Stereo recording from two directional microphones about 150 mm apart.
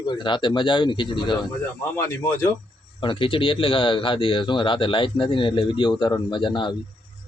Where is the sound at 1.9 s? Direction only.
15° left (ahead or behind).